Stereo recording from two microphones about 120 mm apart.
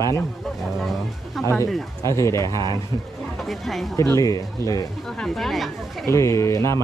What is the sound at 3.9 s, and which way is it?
Speech, 25° left (ahead or behind).